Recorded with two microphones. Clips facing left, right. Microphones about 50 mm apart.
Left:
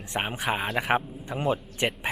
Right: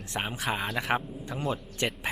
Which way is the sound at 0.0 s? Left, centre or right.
Left.